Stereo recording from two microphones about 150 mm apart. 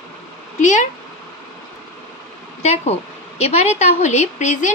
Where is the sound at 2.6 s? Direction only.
45° left (ahead or behind).